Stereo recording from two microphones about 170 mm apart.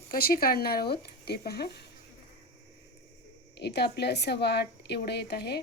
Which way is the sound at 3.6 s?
75° left (ahead or behind).